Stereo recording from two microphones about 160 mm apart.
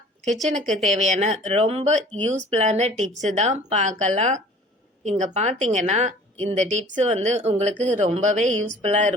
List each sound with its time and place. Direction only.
0.3 s speech: 50° right (ahead or behind)